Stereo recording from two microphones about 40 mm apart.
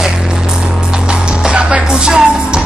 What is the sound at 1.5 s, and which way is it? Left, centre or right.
Music, right.